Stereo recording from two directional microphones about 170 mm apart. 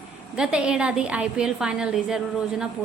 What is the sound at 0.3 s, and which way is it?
A woman's voice, 5° right (ahead or behind).